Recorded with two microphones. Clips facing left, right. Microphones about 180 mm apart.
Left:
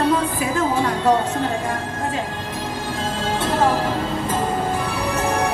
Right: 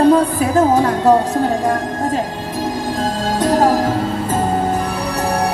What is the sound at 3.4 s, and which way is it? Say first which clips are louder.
Music: right 6 dB; 40° right (ahead or behind).